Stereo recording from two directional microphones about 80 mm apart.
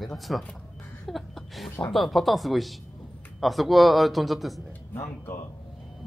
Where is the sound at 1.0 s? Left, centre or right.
Centre.